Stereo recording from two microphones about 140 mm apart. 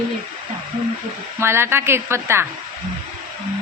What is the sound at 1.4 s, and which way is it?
A woman's voice, 20° right (ahead or behind).